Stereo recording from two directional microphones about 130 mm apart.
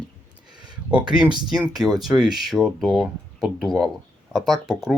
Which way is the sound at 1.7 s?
Centre (ahead or behind).